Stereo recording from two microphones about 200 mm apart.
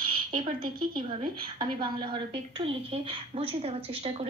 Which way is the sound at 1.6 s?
25° right (ahead or behind).